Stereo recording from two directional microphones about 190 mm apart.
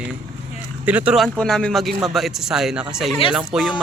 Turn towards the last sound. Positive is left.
turn(degrees=0)  # may be behind; listen again after turning